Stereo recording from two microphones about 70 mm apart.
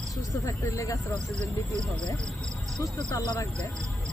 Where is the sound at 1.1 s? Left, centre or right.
Right.